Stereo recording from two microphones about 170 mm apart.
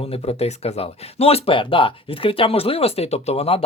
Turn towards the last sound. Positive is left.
turn(degrees=35)  # may be behind; listen again after turning